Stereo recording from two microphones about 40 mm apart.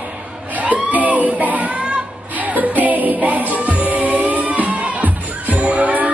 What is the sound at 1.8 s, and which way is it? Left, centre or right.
Music, right.